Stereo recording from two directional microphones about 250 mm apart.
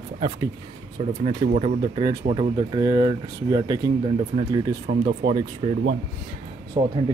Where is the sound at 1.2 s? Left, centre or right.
Right.